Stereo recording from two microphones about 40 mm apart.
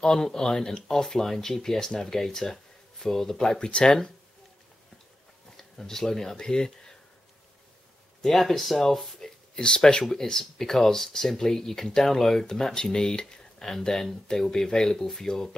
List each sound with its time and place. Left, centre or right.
0.0 s speech: centre
3.5 s speech: left
5.6 s speech: centre
8.2 s speech: centre
9.6 s speech: left